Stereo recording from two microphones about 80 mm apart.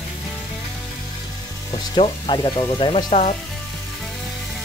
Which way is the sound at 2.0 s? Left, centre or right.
Left.